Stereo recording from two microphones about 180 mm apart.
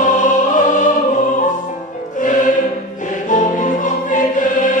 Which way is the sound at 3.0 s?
45° left (ahead or behind).